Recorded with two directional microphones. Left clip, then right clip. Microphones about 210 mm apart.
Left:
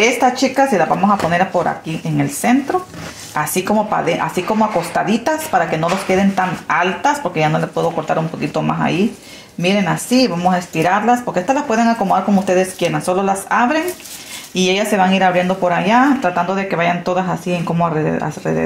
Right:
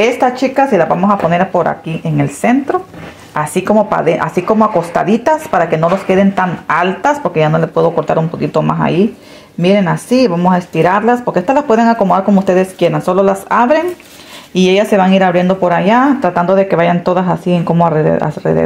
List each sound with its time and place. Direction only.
0.0 s speech: 45° right (ahead or behind)